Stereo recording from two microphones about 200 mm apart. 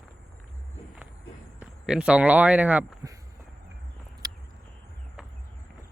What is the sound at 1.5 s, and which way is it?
Speech, 5° right (ahead or behind).